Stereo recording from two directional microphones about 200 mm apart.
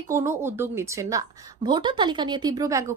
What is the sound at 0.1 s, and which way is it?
A woman's voice, 15° right (ahead or behind).